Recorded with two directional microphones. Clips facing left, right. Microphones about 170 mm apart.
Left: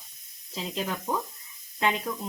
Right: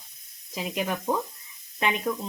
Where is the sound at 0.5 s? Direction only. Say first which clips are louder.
Right 3 dB; 15° right (ahead or behind).